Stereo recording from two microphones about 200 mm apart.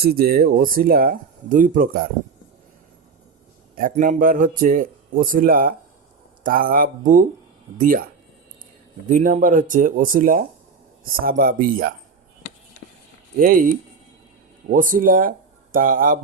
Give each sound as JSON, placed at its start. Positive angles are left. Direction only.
{"t": 0.0, "sound": "speech", "side_deg": -50}
{"t": 3.8, "sound": "speech", "side_deg": -45}
{"t": 14.7, "sound": "speech", "side_deg": -40}